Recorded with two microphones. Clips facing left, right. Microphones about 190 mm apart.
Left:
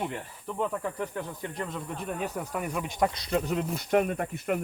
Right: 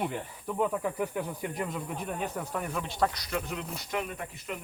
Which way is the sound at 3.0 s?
30° left (ahead or behind).